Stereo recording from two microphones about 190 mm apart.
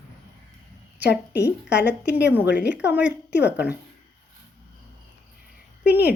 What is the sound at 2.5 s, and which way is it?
Speech, 60° left (ahead or behind).